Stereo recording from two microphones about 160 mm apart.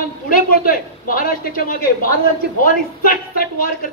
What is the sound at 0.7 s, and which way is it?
A man's voice, 60° left (ahead or behind).